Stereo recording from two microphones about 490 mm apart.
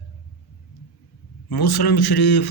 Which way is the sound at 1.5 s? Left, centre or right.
Left.